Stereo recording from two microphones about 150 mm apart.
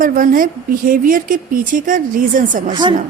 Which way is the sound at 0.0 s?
65° right (ahead or behind).